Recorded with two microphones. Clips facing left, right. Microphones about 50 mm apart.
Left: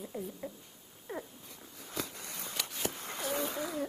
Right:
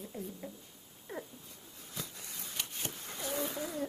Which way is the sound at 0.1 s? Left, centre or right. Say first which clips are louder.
Left 3 dB; centre.